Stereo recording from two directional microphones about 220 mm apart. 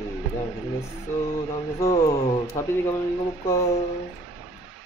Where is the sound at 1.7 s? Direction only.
15° left (ahead or behind).